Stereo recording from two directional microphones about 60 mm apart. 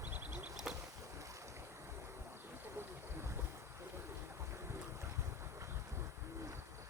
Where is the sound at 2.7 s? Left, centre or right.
Right.